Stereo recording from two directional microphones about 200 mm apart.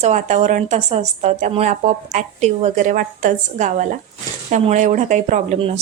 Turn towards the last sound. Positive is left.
turn(degrees=-30)  # may be behind; listen again after turning